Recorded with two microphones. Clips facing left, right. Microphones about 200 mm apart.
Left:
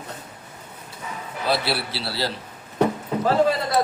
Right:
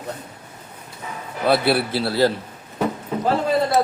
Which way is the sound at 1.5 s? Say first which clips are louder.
Right 6 dB; 55° right (ahead or behind).